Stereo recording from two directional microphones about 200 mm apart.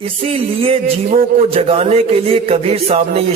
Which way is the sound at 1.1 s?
45° right (ahead or behind).